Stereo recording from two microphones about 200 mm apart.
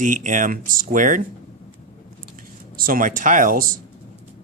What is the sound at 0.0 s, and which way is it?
Speech, 40° right (ahead or behind).